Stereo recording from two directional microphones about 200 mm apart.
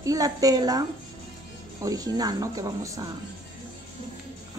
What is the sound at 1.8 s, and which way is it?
A woman's voice, 15° right (ahead or behind).